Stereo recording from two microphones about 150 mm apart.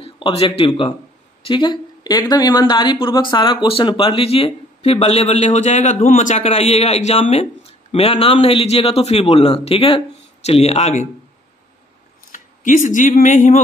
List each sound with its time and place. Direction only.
0.0 s speech: 40° left (ahead or behind)
12.3 s speech: 60° left (ahead or behind)